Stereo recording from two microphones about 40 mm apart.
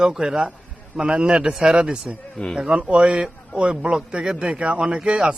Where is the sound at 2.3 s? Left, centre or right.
Centre.